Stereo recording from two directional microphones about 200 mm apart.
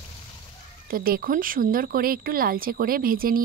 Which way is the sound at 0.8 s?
45° right (ahead or behind).